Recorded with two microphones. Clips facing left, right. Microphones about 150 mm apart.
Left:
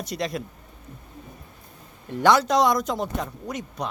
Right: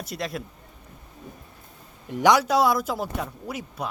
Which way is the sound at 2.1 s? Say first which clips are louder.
Even; 15° right (ahead or behind).